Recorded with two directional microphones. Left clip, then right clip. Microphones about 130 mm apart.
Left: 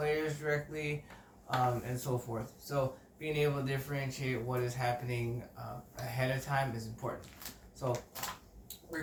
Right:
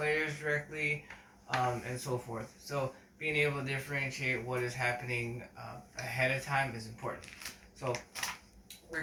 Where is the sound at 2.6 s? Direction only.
25° left (ahead or behind).